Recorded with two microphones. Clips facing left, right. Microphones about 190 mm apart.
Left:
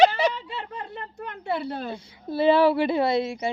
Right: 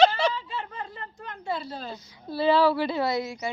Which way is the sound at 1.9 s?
30° left (ahead or behind).